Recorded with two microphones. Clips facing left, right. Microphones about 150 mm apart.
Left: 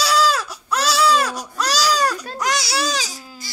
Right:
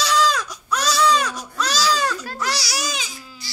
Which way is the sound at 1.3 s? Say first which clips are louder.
Left 2 dB; 35° left (ahead or behind).